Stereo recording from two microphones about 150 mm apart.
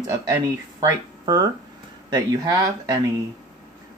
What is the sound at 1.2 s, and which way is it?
Speech, 25° right (ahead or behind).